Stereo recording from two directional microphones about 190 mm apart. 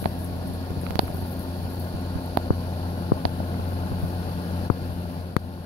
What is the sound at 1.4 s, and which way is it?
Vehicle, 25° left (ahead or behind).